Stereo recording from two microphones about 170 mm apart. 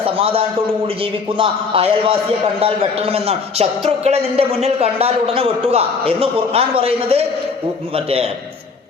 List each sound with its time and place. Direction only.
0.0 s a man's voice: 35° right (ahead or behind)